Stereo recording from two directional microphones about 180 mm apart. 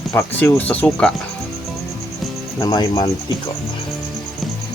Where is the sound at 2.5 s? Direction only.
20° left (ahead or behind).